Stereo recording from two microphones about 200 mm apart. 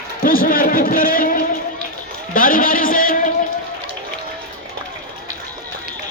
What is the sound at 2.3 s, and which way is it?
Speech, 45° left (ahead or behind).